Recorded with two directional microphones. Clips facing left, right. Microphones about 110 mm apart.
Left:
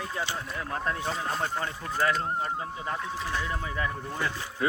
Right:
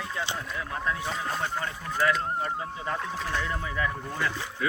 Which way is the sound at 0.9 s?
35° left (ahead or behind).